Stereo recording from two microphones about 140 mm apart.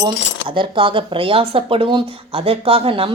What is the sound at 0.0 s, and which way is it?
Speech, 35° right (ahead or behind).